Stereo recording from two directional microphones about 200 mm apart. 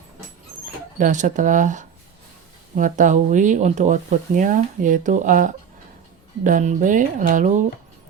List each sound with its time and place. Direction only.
0.9 s speech: 40° right (ahead or behind)